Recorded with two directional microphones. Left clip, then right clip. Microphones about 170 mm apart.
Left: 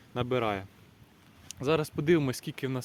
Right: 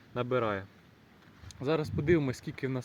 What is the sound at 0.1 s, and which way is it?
A man's voice, 15° left (ahead or behind).